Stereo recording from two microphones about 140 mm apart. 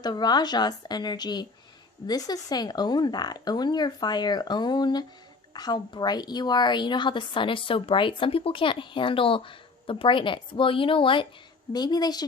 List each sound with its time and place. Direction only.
0.0 s a woman's voice: 30° left (ahead or behind)